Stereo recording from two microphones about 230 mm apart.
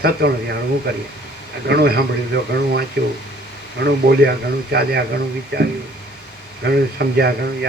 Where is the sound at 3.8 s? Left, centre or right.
Right.